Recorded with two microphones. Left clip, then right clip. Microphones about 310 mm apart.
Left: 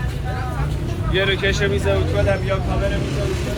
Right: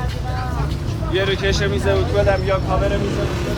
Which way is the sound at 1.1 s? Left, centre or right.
Right.